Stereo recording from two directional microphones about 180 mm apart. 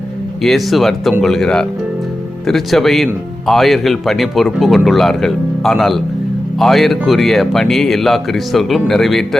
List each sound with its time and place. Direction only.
0.4 s speech: centre (ahead or behind)